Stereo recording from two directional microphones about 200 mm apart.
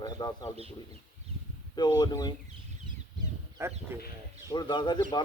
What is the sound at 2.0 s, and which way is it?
Speech, 20° left (ahead or behind).